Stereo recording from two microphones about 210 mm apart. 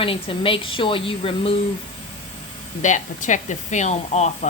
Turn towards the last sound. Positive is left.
turn(degrees=35)  # may be behind; listen again after turning